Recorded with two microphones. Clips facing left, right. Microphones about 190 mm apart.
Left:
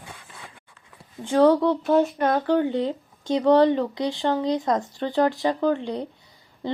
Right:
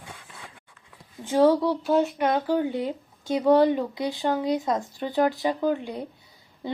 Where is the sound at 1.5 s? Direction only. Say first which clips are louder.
Left 2 dB; 10° right (ahead or behind).